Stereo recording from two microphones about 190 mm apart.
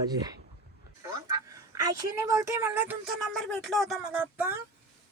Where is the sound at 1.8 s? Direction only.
15° right (ahead or behind).